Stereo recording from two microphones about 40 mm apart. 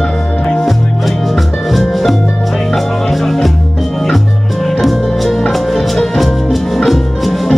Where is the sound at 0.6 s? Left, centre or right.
Centre.